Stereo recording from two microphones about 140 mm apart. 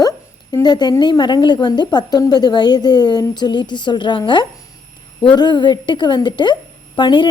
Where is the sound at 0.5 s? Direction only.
30° left (ahead or behind).